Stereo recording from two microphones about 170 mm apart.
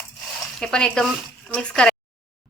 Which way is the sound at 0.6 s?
5° left (ahead or behind).